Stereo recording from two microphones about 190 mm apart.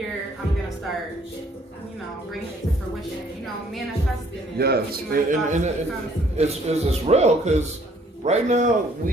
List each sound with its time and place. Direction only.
4.5 s a man's voice: 55° right (ahead or behind); by 9.1 s 40° right (ahead or behind)